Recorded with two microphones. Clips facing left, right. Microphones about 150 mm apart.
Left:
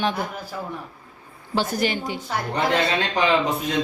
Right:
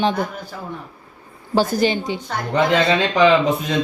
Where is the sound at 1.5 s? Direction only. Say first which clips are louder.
Right 6 dB; 35° right (ahead or behind).